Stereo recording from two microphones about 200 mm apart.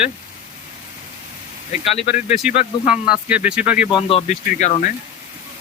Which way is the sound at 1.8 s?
30° left (ahead or behind).